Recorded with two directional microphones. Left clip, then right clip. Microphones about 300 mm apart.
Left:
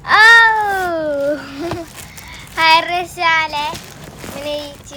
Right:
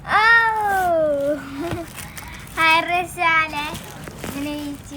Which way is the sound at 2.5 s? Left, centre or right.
Left.